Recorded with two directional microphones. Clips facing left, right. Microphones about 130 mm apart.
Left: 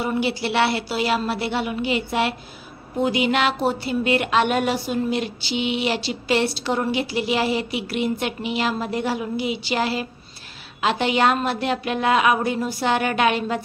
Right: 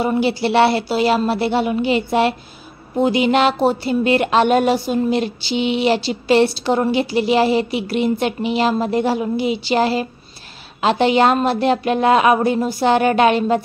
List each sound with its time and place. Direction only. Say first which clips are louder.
0.0 s speech: right 6 dB; 30° right (ahead or behind)